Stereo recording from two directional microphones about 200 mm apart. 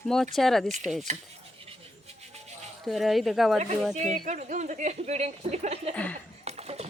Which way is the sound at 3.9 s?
35° right (ahead or behind).